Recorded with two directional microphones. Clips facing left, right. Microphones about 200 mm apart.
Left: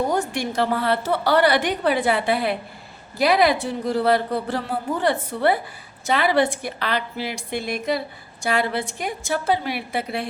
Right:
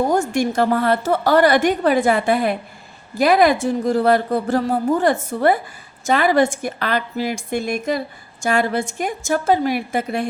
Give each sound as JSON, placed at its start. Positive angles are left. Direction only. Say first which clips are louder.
{"t": 0.1, "sound": "a woman's voice", "louder": "right 5 dB", "side_deg": -45}